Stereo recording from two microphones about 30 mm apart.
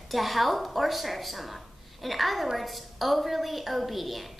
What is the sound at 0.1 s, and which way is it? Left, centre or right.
A woman's voice, centre.